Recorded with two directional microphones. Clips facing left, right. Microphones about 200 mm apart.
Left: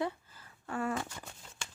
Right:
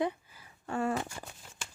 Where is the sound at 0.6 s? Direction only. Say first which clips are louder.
Right 3 dB; 25° right (ahead or behind).